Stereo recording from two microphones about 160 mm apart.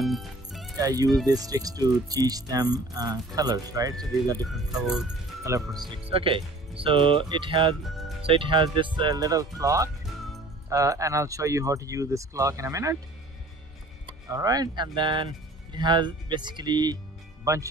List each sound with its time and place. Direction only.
0.0 s music: centre (ahead or behind)
0.7 s speech: 20° right (ahead or behind)
5.4 s speech: 20° right (ahead or behind)
5.9 s speech: 35° right (ahead or behind)
7.8 s speech: centre (ahead or behind)
8.2 s speech: 35° right (ahead or behind); by 12.9 s 20° right (ahead or behind)
14.0 s speech: 20° right (ahead or behind)